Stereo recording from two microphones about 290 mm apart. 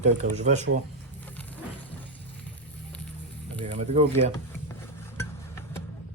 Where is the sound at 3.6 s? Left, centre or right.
Right.